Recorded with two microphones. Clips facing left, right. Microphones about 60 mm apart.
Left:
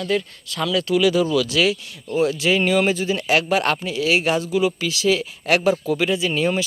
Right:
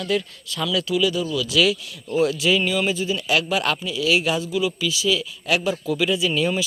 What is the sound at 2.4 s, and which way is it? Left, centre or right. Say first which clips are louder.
Speech: left 3 dB; left.